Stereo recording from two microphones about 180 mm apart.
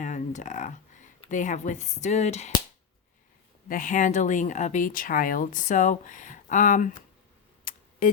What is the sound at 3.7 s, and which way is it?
Speech, 45° left (ahead or behind).